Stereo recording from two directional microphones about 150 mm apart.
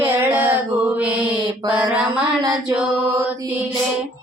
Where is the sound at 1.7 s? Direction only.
10° right (ahead or behind).